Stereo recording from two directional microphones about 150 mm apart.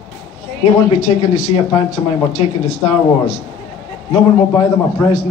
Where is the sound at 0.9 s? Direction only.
55° left (ahead or behind).